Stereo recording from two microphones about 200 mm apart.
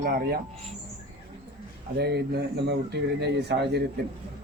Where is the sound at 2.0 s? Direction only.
55° right (ahead or behind).